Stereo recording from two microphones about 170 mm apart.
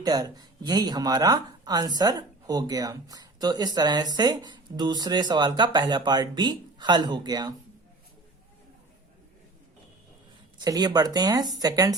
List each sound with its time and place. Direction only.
0.0 s speech: 25° right (ahead or behind)
10.6 s speech: 25° right (ahead or behind)